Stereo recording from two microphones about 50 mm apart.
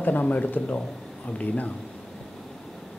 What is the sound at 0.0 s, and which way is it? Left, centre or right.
Speech, left.